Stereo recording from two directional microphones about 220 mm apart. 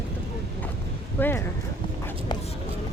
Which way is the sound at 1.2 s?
10° left (ahead or behind).